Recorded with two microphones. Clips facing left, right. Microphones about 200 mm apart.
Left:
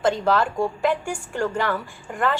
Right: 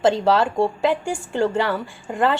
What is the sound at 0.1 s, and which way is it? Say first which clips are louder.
A woman's voice: right 3 dB; 30° right (ahead or behind).